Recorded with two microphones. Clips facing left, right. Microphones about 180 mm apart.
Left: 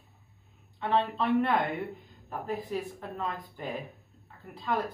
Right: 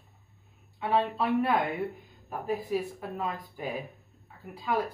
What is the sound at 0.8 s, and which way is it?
Speech, 5° right (ahead or behind).